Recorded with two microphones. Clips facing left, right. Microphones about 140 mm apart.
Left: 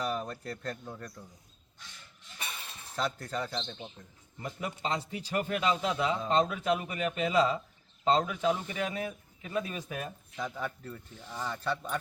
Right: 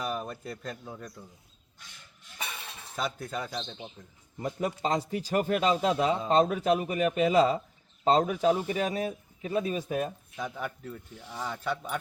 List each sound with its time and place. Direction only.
0.0 s speech: 10° right (ahead or behind)
2.9 s speech: 5° right (ahead or behind)
4.4 s a man's voice: 35° right (ahead or behind)
10.5 s speech: centre (ahead or behind)